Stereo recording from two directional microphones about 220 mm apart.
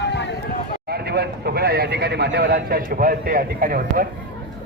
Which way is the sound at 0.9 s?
45° right (ahead or behind).